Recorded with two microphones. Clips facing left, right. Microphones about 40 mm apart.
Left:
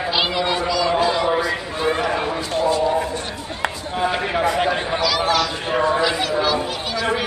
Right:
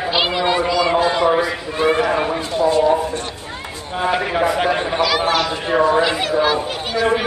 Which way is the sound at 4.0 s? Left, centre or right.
Centre.